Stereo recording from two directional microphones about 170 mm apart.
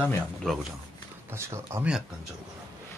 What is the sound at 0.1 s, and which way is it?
Speech, centre (ahead or behind).